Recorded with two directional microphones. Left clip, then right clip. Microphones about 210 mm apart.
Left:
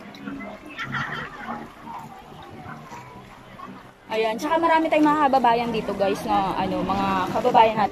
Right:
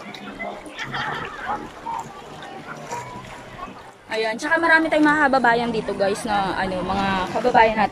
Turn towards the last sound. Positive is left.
turn(degrees=5)  # may be behind; listen again after turning